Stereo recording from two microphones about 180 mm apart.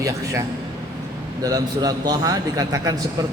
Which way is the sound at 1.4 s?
20° right (ahead or behind).